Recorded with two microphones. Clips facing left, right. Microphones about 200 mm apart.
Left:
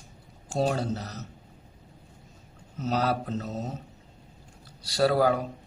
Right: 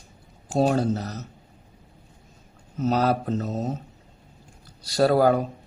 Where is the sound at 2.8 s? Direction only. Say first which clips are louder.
Right 5 dB; 45° right (ahead or behind).